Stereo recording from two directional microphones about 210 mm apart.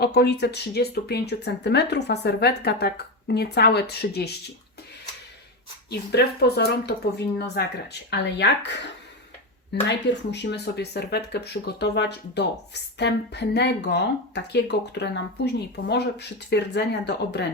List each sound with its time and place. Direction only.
0.0 s speech: 50° left (ahead or behind)
6.1 s speech: 50° left (ahead or behind)
9.9 s speech: 55° left (ahead or behind)